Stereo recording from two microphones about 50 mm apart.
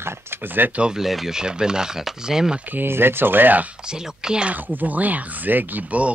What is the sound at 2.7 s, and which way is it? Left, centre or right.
Speech, right.